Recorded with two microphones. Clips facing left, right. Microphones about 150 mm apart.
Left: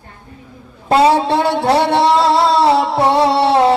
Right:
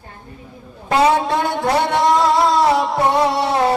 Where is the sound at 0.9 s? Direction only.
30° left (ahead or behind).